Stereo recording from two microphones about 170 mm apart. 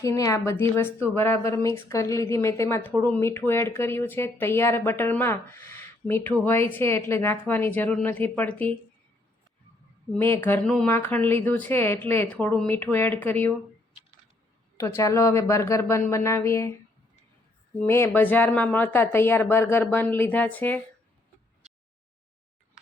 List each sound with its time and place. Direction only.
0.0 s a woman's voice: 20° left (ahead or behind)
10.2 s a woman's voice: 10° left (ahead or behind)
14.8 s a woman's voice: 15° left (ahead or behind)
17.8 s a woman's voice: 15° left (ahead or behind)